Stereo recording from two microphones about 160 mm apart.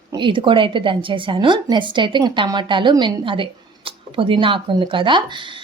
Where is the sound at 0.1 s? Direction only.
30° right (ahead or behind).